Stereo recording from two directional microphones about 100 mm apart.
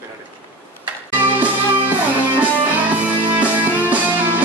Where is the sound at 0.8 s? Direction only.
15° right (ahead or behind).